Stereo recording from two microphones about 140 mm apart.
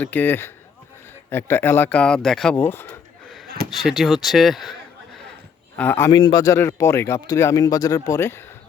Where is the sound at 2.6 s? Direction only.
15° left (ahead or behind).